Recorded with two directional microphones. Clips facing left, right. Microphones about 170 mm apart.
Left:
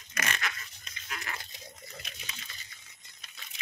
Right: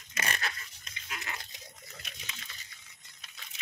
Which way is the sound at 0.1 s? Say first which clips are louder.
Left 1 dB; 30° right (ahead or behind).